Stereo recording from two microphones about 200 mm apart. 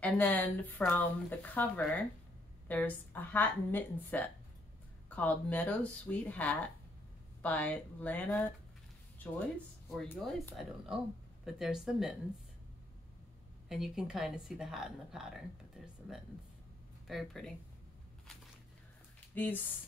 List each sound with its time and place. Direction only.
0.0 s speech: 10° left (ahead or behind)
9.9 s speech: 5° left (ahead or behind)
13.7 s speech: 5° right (ahead or behind)
19.3 s speech: 10° left (ahead or behind)